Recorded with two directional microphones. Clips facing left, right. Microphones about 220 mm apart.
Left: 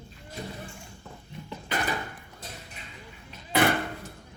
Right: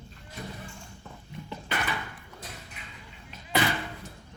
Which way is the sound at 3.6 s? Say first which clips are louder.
Left 9 dB; 55° left (ahead or behind).